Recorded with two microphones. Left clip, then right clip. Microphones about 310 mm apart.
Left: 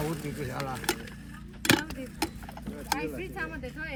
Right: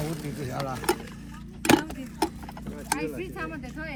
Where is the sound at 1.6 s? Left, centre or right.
Centre.